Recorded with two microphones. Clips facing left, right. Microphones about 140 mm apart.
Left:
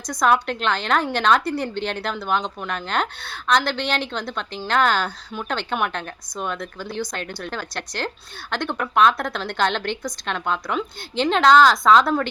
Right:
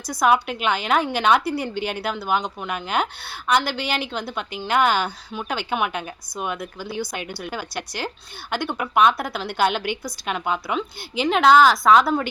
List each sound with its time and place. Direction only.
0.1 s a woman's voice: 5° right (ahead or behind)